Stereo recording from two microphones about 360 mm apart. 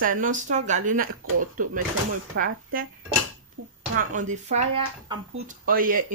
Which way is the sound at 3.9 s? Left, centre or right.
Right.